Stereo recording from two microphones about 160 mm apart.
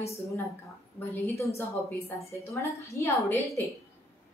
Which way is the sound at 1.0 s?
15° left (ahead or behind).